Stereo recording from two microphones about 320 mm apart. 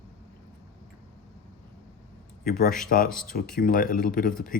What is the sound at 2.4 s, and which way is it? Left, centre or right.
A man's voice, left.